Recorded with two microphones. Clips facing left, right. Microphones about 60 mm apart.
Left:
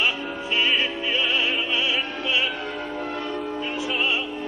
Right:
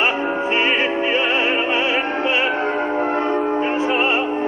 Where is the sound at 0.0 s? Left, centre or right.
Right.